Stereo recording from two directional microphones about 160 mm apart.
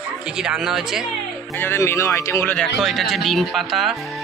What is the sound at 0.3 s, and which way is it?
Speech, 5° right (ahead or behind).